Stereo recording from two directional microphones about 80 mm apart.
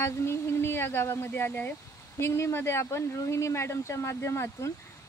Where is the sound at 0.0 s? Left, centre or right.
Left.